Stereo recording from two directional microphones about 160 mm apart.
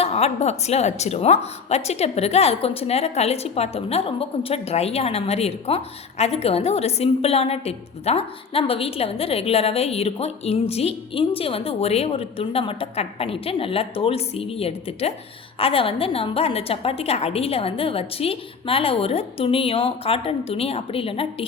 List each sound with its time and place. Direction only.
0.0 s a woman's voice: 40° left (ahead or behind)